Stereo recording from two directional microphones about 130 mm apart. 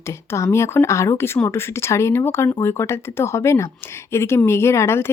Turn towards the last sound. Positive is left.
turn(degrees=20)  # may be behind; listen again after turning